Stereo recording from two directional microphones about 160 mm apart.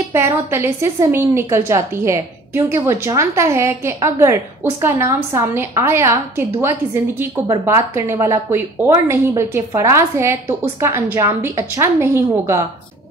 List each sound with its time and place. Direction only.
0.1 s a woman's voice: 15° right (ahead or behind)